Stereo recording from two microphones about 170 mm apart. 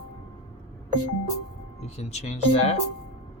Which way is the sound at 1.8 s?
40° left (ahead or behind).